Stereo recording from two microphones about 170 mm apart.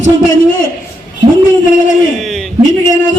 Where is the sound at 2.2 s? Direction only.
Centre (ahead or behind).